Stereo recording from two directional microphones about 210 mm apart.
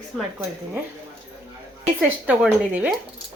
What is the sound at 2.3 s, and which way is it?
Speech, 5° right (ahead or behind).